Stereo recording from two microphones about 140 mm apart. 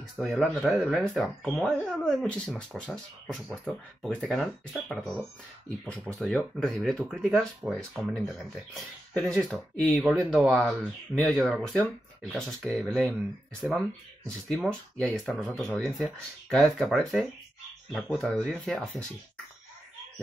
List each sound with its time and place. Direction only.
0.2 s speech: centre (ahead or behind)
10.6 s speech: 5° left (ahead or behind)